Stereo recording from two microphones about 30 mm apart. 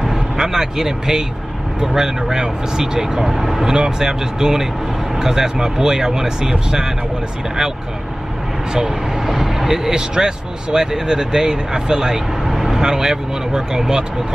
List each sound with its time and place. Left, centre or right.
0.0 s speech: centre
8.7 s speech: centre
9.2 s vehicle: centre
9.8 s speech: right